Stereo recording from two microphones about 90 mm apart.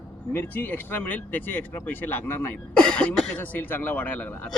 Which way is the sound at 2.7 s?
10° left (ahead or behind).